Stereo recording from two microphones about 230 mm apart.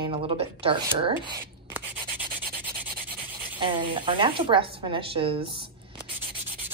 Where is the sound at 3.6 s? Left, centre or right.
Right.